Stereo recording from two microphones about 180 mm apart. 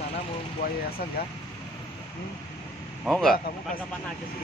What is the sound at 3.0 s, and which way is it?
Speech, centre (ahead or behind).